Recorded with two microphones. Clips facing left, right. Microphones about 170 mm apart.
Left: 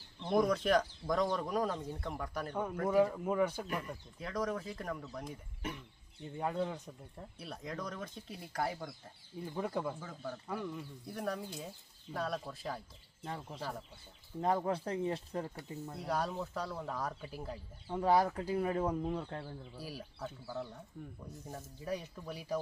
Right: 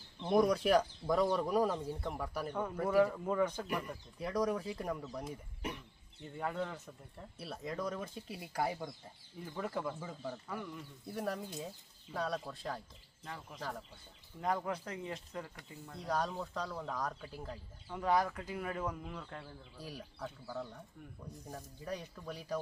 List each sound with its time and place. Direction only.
0.2 s speech: 10° right (ahead or behind)
2.9 s speech: 15° left (ahead or behind)
3.8 s speech: 10° right (ahead or behind)
6.4 s speech: 15° left (ahead or behind)
7.3 s speech: 5° right (ahead or behind)
9.4 s speech: 20° left (ahead or behind)
10.0 s speech: 10° right (ahead or behind)
13.2 s speech: 30° left (ahead or behind)
13.6 s speech: 5° left (ahead or behind)
14.4 s speech: 30° left (ahead or behind)
16.0 s speech: 5° left (ahead or behind)
17.8 s speech: 30° left (ahead or behind)
19.8 s speech: 10° left (ahead or behind)